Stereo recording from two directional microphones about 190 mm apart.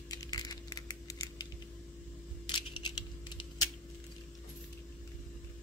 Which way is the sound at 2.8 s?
25° left (ahead or behind).